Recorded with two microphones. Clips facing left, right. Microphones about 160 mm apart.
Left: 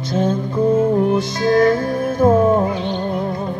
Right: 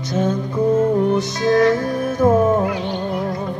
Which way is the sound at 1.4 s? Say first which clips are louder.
Left 1 dB; 20° right (ahead or behind).